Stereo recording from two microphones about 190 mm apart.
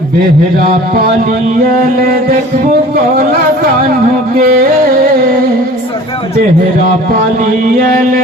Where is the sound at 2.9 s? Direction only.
50° right (ahead or behind).